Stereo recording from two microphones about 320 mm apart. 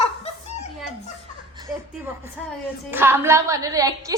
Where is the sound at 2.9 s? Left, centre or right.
Centre.